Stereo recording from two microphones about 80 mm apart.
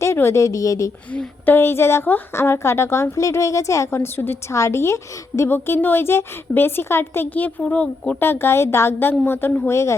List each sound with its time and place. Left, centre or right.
0.0 s a woman's voice: left
1.1 s a woman's voice: centre
1.5 s a woman's voice: left; by 8.2 s centre
8.2 s a woman's voice: left